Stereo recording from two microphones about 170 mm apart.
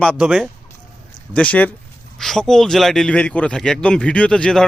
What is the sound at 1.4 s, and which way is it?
A man's voice, 10° left (ahead or behind).